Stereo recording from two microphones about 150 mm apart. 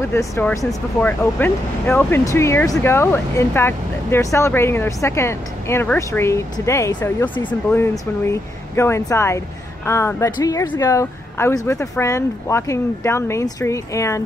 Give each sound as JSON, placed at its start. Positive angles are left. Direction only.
{"t": 0.1, "sound": "speech", "side_deg": 15}